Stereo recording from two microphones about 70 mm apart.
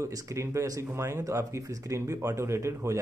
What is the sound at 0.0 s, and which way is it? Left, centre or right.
Speech, right.